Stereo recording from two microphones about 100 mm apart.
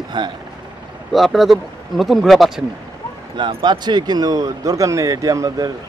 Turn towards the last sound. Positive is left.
turn(degrees=-35)  # may be behind; listen again after turning